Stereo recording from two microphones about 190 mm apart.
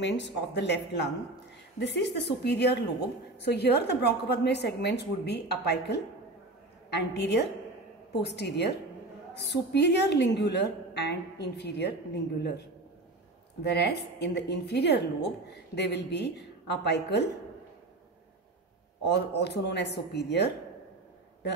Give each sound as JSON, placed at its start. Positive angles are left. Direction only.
{"t": 0.0, "sound": "a woman's voice", "side_deg": 65}
{"t": 13.6, "sound": "a woman's voice", "side_deg": 60}
{"t": 19.0, "sound": "a woman's voice", "side_deg": 65}